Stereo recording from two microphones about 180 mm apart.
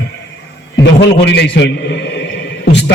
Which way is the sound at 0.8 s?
75° left (ahead or behind).